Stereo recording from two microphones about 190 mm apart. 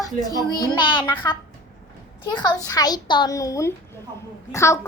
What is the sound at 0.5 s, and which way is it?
Speech, 20° left (ahead or behind).